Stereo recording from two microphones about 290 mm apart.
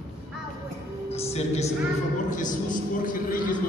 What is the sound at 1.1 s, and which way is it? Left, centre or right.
Music, left.